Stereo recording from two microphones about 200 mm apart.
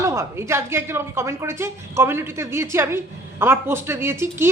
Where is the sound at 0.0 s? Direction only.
15° right (ahead or behind).